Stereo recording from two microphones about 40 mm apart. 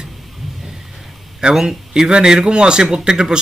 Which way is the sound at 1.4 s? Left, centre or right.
Right.